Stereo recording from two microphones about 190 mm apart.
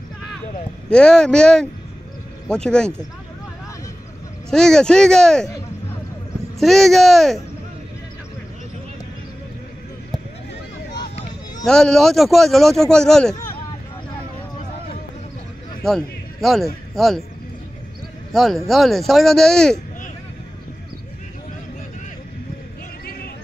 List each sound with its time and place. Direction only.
0.8 s speech: 5° left (ahead or behind)
4.5 s speech: 5° left (ahead or behind)
6.6 s speech: centre (ahead or behind)
11.0 s a sound: 25° left (ahead or behind)
11.6 s speech: 5° left (ahead or behind)
15.8 s a sound: centre (ahead or behind)
16.9 s speech: centre (ahead or behind)
18.3 s speech: centre (ahead or behind)
23.0 s a sound: 55° left (ahead or behind)